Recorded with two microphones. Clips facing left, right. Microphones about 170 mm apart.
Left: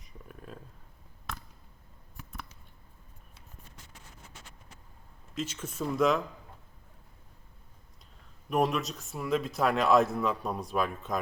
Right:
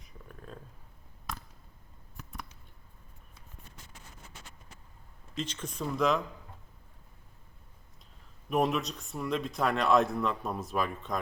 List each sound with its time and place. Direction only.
0.0 s a sound: 5° left (ahead or behind)
5.3 s speech: 5° left (ahead or behind)
8.4 s speech: centre (ahead or behind)